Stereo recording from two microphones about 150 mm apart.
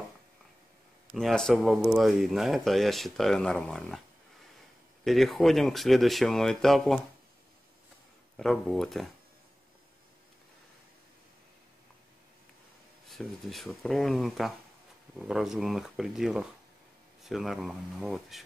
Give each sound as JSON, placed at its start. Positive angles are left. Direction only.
{"t": 1.1, "sound": "speech", "side_deg": 5}
{"t": 5.0, "sound": "speech", "side_deg": 0}
{"t": 8.4, "sound": "speech", "side_deg": 0}
{"t": 13.1, "sound": "speech", "side_deg": 0}